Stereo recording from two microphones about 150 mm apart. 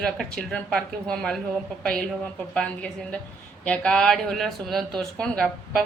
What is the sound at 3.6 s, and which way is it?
Speech, 5° left (ahead or behind).